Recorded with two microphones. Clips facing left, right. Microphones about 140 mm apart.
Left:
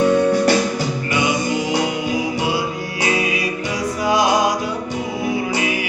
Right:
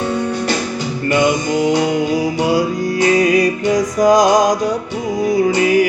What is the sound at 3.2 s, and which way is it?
Music, 40° right (ahead or behind).